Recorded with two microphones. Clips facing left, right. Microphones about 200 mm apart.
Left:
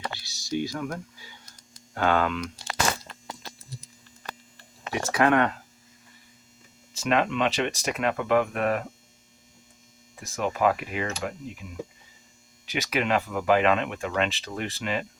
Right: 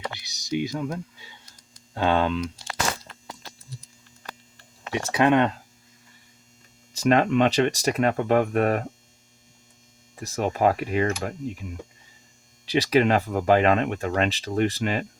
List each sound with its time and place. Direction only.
0.1 s computer keyboard: 20° right (ahead or behind)
2.0 s speech: 25° right (ahead or behind)
4.9 s speech: 25° right (ahead or behind)
6.9 s speech: 40° right (ahead or behind)
10.2 s speech: 40° right (ahead or behind)
12.6 s speech: 35° right (ahead or behind)